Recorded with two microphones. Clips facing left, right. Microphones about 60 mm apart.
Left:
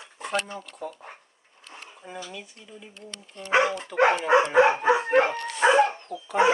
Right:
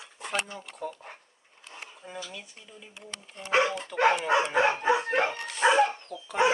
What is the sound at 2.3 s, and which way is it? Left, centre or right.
Speech, centre.